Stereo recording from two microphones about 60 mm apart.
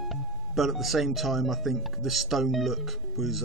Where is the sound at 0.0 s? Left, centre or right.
Centre.